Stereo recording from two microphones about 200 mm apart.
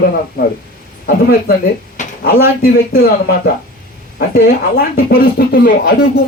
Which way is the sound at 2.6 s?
50° left (ahead or behind).